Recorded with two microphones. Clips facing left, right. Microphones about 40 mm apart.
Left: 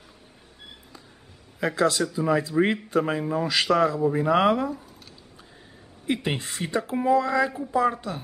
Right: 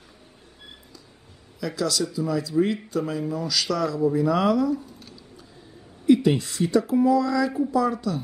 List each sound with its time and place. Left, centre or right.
1.6 s speech: left
6.0 s speech: left